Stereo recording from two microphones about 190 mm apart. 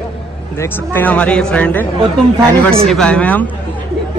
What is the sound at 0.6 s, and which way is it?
A child's voice, 10° left (ahead or behind).